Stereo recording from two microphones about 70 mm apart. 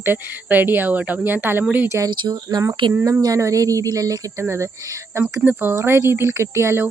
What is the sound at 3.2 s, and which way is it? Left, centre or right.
Speech, right.